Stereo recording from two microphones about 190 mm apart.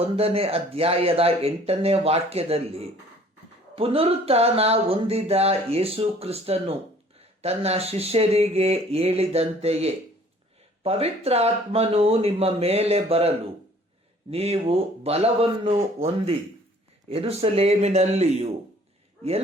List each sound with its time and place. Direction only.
0.0 s speech: 30° right (ahead or behind)